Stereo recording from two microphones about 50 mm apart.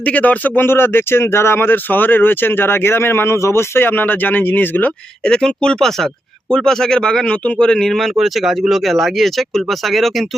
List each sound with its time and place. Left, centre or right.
0.0 s speech: left
0.6 s speech: left
5.2 s speech: centre